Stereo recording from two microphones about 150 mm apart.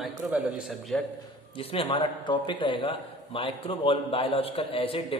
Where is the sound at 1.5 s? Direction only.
40° left (ahead or behind).